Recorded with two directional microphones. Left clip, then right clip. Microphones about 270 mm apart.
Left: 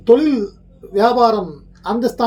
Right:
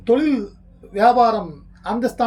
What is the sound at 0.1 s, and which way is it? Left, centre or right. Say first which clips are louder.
Speech: left 5 dB; centre.